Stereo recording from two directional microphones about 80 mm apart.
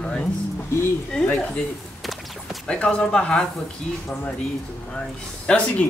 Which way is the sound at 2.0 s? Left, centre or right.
Centre.